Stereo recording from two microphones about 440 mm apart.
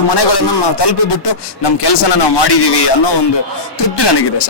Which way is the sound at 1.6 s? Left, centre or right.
Left.